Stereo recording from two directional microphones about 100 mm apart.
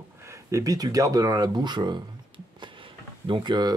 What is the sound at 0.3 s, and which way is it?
Speech, 30° right (ahead or behind).